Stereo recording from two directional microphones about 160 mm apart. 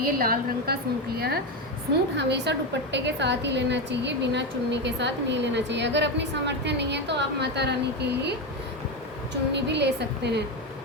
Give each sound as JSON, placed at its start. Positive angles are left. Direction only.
{"t": 0.0, "sound": "a woman's voice", "side_deg": -65}
{"t": 2.1, "sound": "a woman's voice", "side_deg": -90}
{"t": 9.5, "sound": "a woman's voice", "side_deg": -90}